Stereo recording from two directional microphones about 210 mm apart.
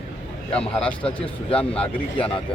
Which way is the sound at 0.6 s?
5° left (ahead or behind).